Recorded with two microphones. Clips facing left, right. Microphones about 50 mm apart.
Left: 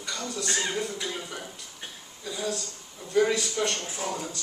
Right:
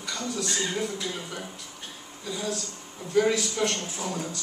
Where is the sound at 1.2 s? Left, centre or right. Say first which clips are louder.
Right 1 dB; centre.